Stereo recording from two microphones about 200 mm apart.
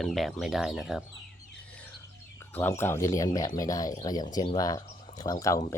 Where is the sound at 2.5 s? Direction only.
10° left (ahead or behind).